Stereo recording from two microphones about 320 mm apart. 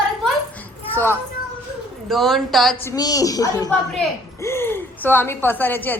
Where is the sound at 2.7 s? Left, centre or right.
Centre.